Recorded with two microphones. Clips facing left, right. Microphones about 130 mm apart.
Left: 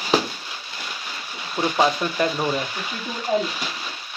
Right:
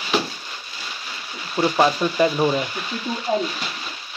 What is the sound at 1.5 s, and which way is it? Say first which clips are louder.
Speech: right 2 dB; 5° right (ahead or behind).